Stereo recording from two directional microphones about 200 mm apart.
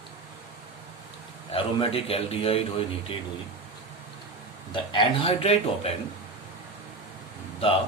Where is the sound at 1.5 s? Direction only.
30° left (ahead or behind).